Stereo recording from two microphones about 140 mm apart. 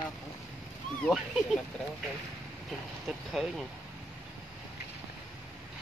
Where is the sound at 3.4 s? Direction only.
Centre (ahead or behind).